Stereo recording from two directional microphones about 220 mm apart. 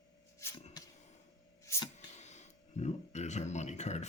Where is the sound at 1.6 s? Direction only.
15° left (ahead or behind).